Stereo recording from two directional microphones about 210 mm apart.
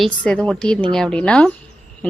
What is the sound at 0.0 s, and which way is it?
A woman's voice, 5° left (ahead or behind).